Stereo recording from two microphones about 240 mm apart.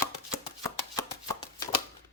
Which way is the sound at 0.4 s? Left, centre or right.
Centre.